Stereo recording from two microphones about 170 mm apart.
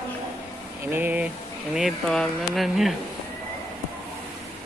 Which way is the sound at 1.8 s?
Centre (ahead or behind).